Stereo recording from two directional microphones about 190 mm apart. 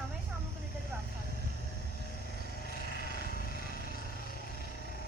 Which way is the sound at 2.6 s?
50° left (ahead or behind).